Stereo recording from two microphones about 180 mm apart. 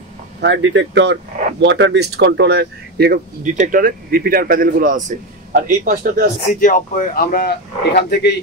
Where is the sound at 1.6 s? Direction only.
75° right (ahead or behind); by 6.3 s 50° right (ahead or behind).